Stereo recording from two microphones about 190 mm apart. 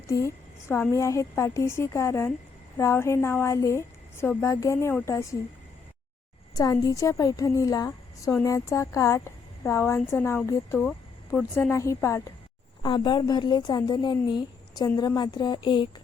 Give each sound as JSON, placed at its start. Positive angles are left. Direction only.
{"t": 0.1, "sound": "a woman's voice", "side_deg": 15}
{"t": 6.5, "sound": "a woman's voice", "side_deg": 20}
{"t": 11.3, "sound": "a woman's voice", "side_deg": 5}
{"t": 11.7, "sound": "a woman's voice", "side_deg": 15}